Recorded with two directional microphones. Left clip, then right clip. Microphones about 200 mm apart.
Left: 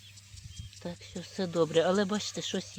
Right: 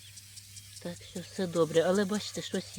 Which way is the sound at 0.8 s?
Centre (ahead or behind).